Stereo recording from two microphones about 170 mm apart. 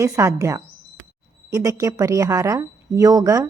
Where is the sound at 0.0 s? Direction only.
15° right (ahead or behind).